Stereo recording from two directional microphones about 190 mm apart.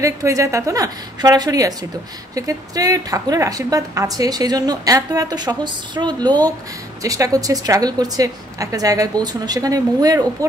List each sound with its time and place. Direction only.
0.0 s a woman's voice: 15° right (ahead or behind)